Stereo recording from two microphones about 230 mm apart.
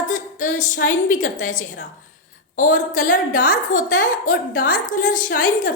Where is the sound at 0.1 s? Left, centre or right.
Left.